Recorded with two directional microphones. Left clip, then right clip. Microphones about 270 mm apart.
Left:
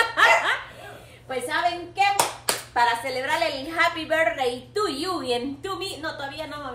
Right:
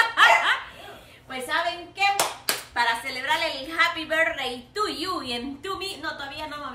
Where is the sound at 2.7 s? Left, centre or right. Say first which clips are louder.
Left 3 dB; centre.